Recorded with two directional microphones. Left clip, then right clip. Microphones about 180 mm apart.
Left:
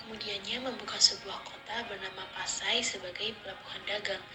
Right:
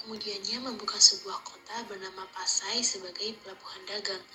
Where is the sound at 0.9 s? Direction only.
20° left (ahead or behind).